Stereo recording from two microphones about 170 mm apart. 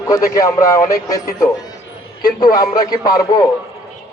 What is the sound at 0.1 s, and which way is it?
A man's voice, 20° left (ahead or behind).